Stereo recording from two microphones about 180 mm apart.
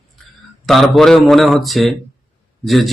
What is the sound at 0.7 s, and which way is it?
Speech, centre (ahead or behind).